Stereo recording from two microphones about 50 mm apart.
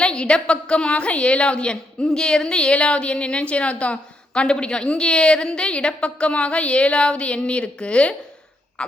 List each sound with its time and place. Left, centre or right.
0.0 s a woman's voice: centre